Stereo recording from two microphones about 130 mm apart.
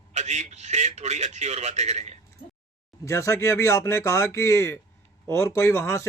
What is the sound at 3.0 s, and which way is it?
A man's voice, 20° left (ahead or behind).